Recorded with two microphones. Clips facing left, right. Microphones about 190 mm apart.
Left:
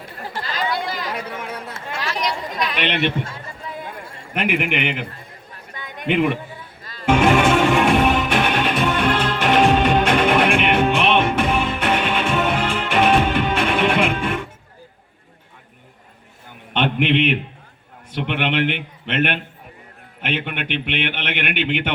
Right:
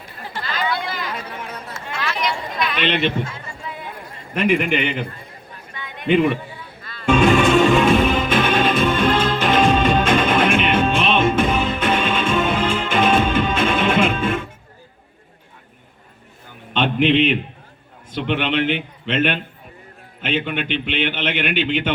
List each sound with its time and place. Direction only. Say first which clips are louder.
0.2 s chatter: even; 40° left (ahead or behind)
4.4 s a man's voice: right 3 dB; 70° left (ahead or behind)
5.7 s a sound: left 1 dB; 45° left (ahead or behind)
7.3 s music: right 2 dB; 65° left (ahead or behind)
16.7 s a sound: right 2 dB; 65° left (ahead or behind)
18.1 s a man's voice: right 1 dB; 65° left (ahead or behind)